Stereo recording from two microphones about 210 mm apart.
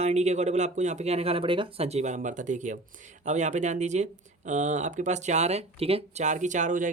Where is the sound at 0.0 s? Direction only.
30° right (ahead or behind).